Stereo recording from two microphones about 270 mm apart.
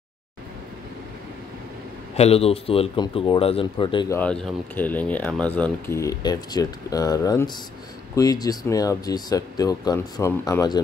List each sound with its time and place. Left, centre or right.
2.1 s speech: left
4.2 s speech: centre